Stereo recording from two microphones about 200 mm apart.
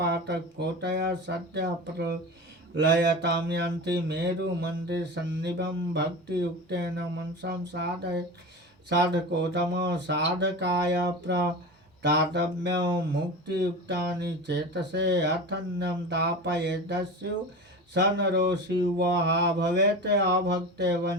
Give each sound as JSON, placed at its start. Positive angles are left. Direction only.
{"t": 0.0, "sound": "speech", "side_deg": -55}
{"t": 8.9, "sound": "speech", "side_deg": -60}